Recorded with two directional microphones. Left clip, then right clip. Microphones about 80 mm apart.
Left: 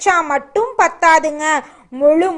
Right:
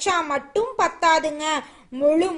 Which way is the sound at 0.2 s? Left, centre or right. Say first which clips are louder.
Left 7 dB; centre.